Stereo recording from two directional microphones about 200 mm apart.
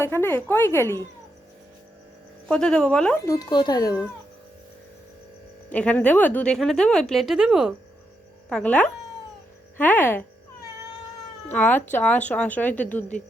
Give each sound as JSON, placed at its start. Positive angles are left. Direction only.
{"t": 0.0, "sound": "speech", "side_deg": 10}
{"t": 2.5, "sound": "speech", "side_deg": 5}
{"t": 3.2, "sound": "speech", "side_deg": 20}
{"t": 5.7, "sound": "speech", "side_deg": 5}
{"t": 11.4, "sound": "speech", "side_deg": 10}